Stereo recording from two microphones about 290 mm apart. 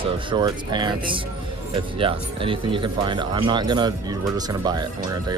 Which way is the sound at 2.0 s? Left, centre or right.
Centre.